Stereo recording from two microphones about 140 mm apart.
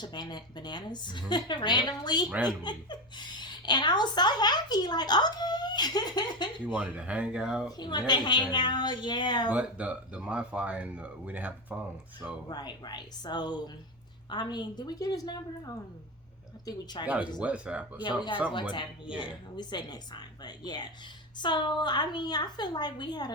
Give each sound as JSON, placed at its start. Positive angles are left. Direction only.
{"t": 0.0, "sound": "speech", "side_deg": 30}
{"t": 6.7, "sound": "speech", "side_deg": -10}
{"t": 7.8, "sound": "speech", "side_deg": 30}
{"t": 9.5, "sound": "speech", "side_deg": -10}
{"t": 12.5, "sound": "a woman's voice", "side_deg": 30}
{"t": 17.4, "sound": "speech", "side_deg": -10}
{"t": 18.0, "sound": "speech", "side_deg": 35}